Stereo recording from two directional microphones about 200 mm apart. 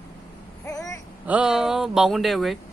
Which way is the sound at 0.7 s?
15° left (ahead or behind).